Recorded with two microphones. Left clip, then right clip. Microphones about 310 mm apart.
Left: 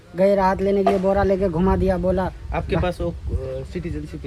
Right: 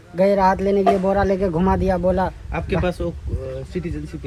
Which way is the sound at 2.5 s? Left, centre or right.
Left.